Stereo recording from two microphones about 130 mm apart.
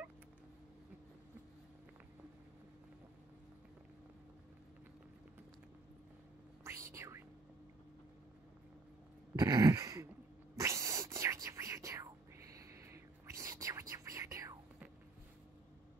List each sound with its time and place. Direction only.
6.6 s whispering: 20° right (ahead or behind)
9.3 s a sound: 25° right (ahead or behind)
10.5 s whispering: 20° right (ahead or behind)